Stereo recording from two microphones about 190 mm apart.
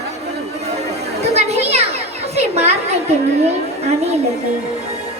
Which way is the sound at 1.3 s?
35° right (ahead or behind).